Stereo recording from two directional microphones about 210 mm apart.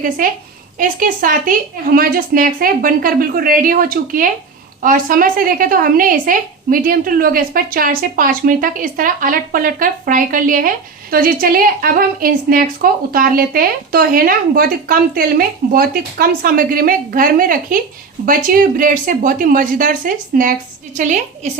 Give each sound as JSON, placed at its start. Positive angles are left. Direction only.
{"t": 0.8, "sound": "a woman's voice", "side_deg": -40}